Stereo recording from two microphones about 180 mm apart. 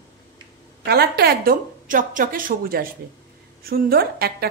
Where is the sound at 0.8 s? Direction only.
60° right (ahead or behind).